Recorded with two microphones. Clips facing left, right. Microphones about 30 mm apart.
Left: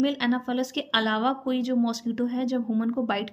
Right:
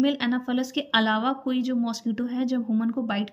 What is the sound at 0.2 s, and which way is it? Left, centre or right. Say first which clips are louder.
Speech: even; centre.